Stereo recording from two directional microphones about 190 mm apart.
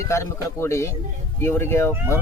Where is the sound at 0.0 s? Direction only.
15° left (ahead or behind).